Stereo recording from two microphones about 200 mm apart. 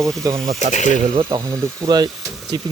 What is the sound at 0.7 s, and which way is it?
Speech, 35° left (ahead or behind).